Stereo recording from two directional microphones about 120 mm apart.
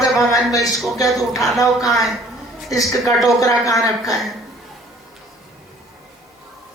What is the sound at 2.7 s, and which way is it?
A woman's voice, 30° left (ahead or behind).